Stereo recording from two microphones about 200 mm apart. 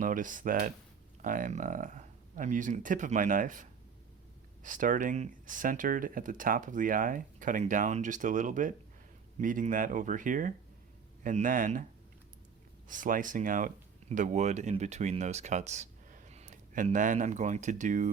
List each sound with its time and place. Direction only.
0.0 s speech: 40° right (ahead or behind)
12.9 s speech: 40° right (ahead or behind)